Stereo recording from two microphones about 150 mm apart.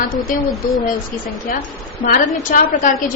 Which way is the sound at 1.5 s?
75° left (ahead or behind).